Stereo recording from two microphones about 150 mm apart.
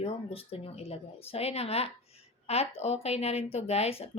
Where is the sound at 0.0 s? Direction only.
40° left (ahead or behind).